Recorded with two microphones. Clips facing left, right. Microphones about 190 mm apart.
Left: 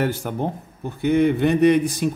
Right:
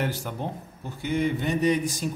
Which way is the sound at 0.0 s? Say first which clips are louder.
Left 7 dB; 55° left (ahead or behind).